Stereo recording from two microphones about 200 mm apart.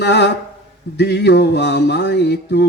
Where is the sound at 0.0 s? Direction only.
60° left (ahead or behind).